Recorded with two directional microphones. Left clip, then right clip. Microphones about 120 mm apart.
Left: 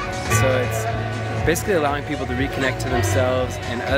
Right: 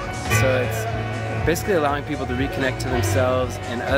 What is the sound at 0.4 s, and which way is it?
Speech, 5° right (ahead or behind).